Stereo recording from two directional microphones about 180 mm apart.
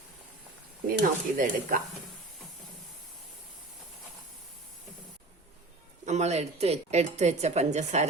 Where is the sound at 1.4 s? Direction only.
45° right (ahead or behind).